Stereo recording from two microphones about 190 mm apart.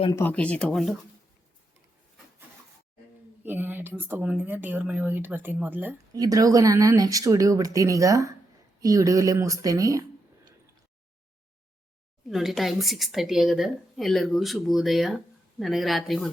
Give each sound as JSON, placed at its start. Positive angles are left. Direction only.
{"t": 0.2, "sound": "speech", "side_deg": 10}
{"t": 3.4, "sound": "speech", "side_deg": -10}
{"t": 12.3, "sound": "speech", "side_deg": 0}